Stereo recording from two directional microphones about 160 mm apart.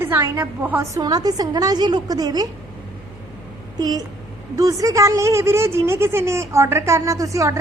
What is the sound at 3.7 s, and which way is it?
A woman's voice, 25° right (ahead or behind).